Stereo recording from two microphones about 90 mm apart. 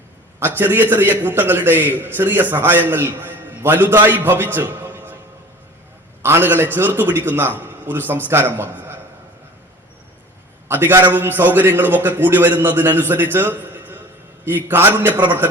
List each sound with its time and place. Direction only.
0.3 s a man's voice: 25° right (ahead or behind)
6.2 s a man's voice: 25° right (ahead or behind)
10.7 s a man's voice: 25° right (ahead or behind)